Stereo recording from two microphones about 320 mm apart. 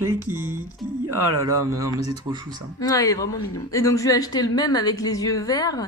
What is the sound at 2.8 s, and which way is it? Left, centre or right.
A woman's voice, centre.